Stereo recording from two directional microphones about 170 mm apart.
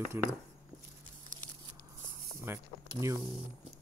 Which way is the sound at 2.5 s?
15° right (ahead or behind).